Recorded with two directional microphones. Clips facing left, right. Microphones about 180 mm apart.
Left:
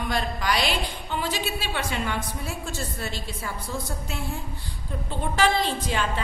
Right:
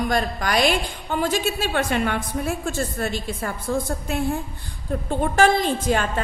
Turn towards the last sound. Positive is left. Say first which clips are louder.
# right 5 dB
turn(degrees=-50)  # may be behind; listen again after turning